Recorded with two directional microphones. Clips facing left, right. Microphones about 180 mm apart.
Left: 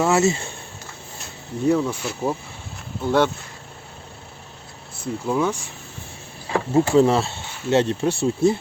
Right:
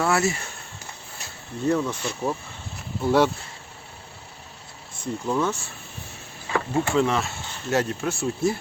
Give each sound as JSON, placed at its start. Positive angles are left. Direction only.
{"t": 0.0, "sound": "speech", "side_deg": 20}
{"t": 1.6, "sound": "speech", "side_deg": 10}
{"t": 3.0, "sound": "speech", "side_deg": -5}
{"t": 5.2, "sound": "speech", "side_deg": 10}
{"t": 6.5, "sound": "speech", "side_deg": 35}